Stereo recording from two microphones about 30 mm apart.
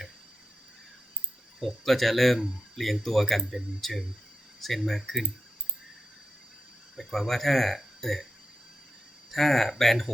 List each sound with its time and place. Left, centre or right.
1.5 s speech: centre
7.0 s speech: centre
9.3 s speech: centre